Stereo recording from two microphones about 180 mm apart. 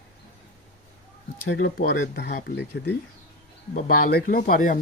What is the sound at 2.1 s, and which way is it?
Speech, 65° left (ahead or behind).